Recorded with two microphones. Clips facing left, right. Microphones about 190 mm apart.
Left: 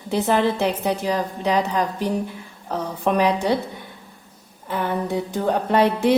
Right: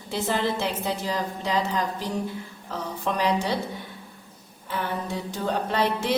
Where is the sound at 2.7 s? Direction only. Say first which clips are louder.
Left 7 dB; 60° left (ahead or behind).